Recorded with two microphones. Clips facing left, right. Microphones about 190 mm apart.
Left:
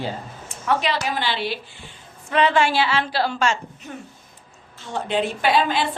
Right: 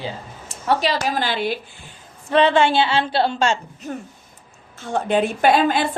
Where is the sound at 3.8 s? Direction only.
40° right (ahead or behind).